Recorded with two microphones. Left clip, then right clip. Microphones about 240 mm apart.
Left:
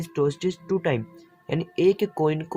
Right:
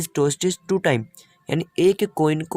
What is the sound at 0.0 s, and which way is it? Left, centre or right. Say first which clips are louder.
Speech: right 3 dB; right.